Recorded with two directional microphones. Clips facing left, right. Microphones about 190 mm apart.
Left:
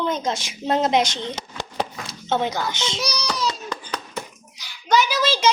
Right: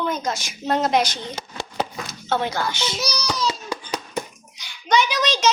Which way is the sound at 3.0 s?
Centre (ahead or behind).